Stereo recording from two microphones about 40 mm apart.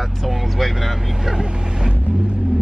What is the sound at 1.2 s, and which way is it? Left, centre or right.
Vehicle, centre.